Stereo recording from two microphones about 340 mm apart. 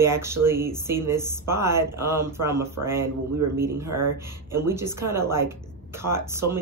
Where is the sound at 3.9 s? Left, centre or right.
Right.